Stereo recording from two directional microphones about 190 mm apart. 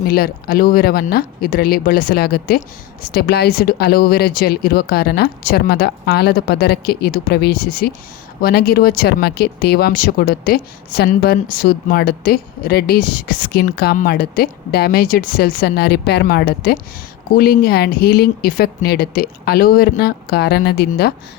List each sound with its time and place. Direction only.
0.1 s speech: 50° left (ahead or behind)